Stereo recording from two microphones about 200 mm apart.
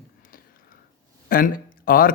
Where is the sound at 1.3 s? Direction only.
45° left (ahead or behind).